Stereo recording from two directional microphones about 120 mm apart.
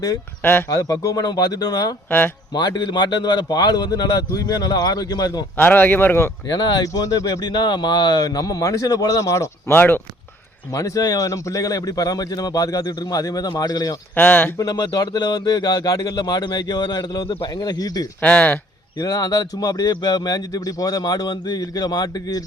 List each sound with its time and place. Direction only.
0.7 s speech: 30° left (ahead or behind)
2.0 s speech: 15° left (ahead or behind)
2.5 s speech: 35° left (ahead or behind)
5.5 s speech: 15° left (ahead or behind)
6.5 s speech: 35° left (ahead or behind); by 10.0 s 15° left (ahead or behind)
10.7 s speech: 30° left (ahead or behind)
14.2 s speech: 15° left (ahead or behind)
14.6 s speech: 35° left (ahead or behind)
18.2 s speech: 10° left (ahead or behind)
18.9 s speech: 30° left (ahead or behind)